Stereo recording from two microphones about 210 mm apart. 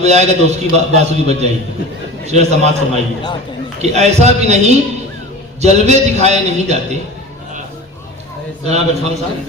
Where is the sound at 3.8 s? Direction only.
30° right (ahead or behind).